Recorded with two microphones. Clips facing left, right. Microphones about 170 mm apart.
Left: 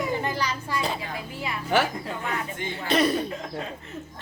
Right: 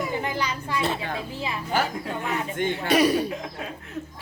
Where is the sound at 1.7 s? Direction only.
80° left.